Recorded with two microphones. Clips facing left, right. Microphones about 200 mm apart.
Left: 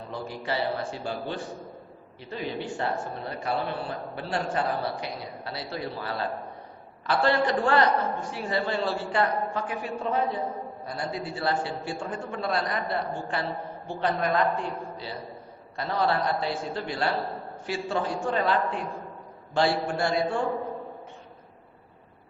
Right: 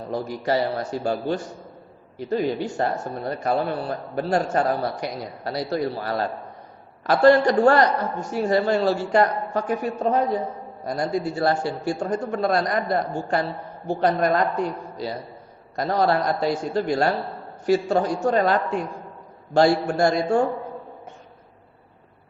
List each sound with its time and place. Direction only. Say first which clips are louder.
0.1 s a man's voice: right 8 dB; 40° right (ahead or behind)